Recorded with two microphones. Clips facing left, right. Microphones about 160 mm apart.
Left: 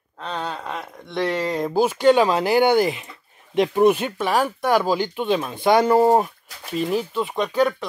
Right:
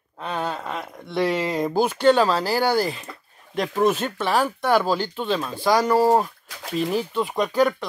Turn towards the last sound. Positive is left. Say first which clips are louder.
# even
turn(degrees=0)  # may be behind; listen again after turning